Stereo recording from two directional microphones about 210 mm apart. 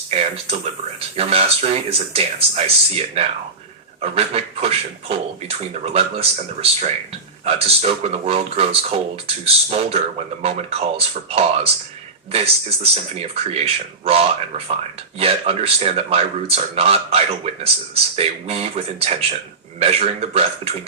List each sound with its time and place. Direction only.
0.1 s speech: 30° right (ahead or behind)